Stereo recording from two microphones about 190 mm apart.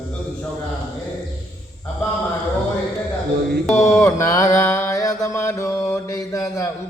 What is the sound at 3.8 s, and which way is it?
Mantra, 15° left (ahead or behind).